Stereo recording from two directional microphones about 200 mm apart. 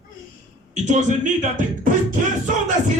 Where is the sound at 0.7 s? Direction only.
40° right (ahead or behind).